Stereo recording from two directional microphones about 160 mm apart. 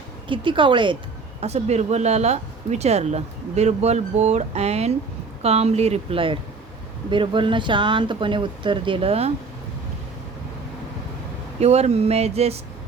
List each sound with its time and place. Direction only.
0.3 s speech: 30° right (ahead or behind)
1.4 s speech: 40° right (ahead or behind)
11.6 s speech: 45° right (ahead or behind)